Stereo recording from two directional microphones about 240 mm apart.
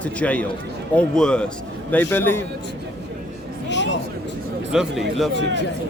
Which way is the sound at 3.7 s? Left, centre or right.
Left.